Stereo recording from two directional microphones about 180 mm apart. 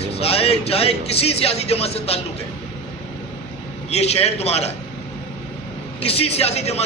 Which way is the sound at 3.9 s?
35° left (ahead or behind).